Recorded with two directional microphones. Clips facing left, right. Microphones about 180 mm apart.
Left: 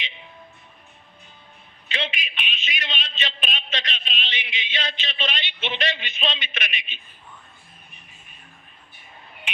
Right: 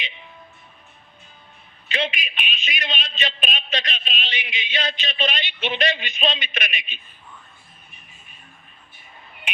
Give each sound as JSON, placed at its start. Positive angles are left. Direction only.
{"t": 1.9, "sound": "a man's voice", "side_deg": -45}